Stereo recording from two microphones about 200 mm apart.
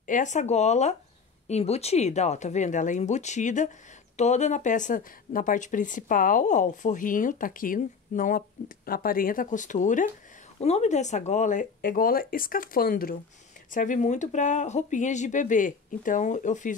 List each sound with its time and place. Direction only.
0.0 s speech: 40° left (ahead or behind)